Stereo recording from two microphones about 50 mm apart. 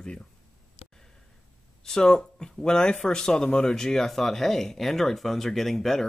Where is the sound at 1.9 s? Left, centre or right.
Centre.